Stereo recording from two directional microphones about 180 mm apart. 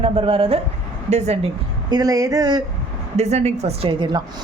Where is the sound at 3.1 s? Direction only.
35° right (ahead or behind).